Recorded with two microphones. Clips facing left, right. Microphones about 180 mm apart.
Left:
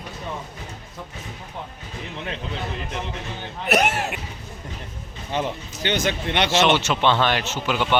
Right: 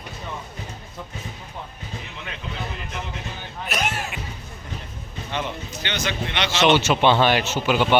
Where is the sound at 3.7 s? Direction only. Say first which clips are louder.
Left 7 dB; 65° left (ahead or behind).